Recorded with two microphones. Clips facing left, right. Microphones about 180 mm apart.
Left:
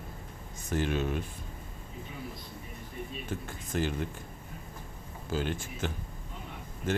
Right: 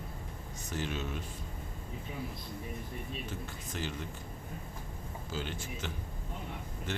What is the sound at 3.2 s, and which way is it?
Speech, 50° left (ahead or behind).